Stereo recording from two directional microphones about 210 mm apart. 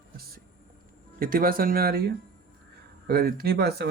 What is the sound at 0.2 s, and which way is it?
Music, 45° right (ahead or behind).